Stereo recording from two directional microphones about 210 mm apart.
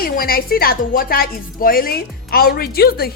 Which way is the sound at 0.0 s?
45° left (ahead or behind).